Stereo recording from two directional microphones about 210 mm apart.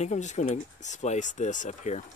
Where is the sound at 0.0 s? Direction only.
35° left (ahead or behind).